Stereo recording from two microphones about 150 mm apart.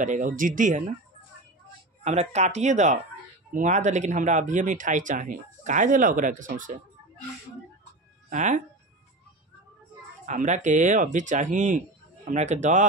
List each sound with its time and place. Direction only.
0.0 s speech: 60° right (ahead or behind)
2.0 s speech: 50° right (ahead or behind)
8.3 s speech: 55° right (ahead or behind)
10.2 s speech: 55° right (ahead or behind)